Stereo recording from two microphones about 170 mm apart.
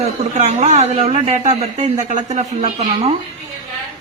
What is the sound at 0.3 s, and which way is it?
Speech, 45° right (ahead or behind).